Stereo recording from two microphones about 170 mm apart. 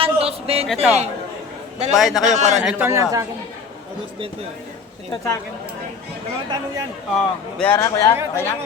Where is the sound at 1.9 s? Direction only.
Centre (ahead or behind).